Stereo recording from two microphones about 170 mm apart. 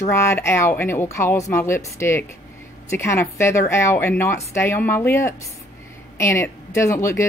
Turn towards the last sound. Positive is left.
turn(degrees=15)  # may be behind; listen again after turning